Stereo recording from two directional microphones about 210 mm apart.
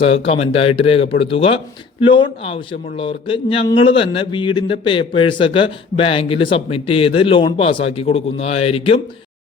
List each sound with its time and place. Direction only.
0.0 s speech: 25° left (ahead or behind)